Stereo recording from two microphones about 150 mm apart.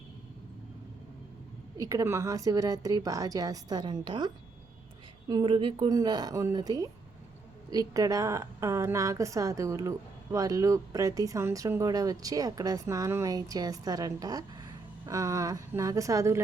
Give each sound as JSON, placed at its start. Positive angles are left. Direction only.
{"t": 1.8, "sound": "speech", "side_deg": -20}
{"t": 5.3, "sound": "speech", "side_deg": -30}